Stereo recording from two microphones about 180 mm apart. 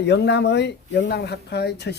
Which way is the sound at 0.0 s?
70° left (ahead or behind).